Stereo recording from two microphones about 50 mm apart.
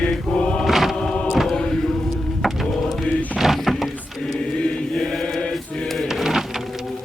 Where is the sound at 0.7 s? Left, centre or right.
Centre.